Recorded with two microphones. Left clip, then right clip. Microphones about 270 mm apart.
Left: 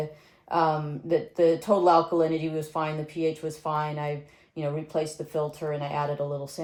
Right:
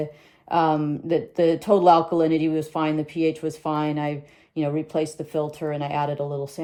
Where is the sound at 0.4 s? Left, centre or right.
Right.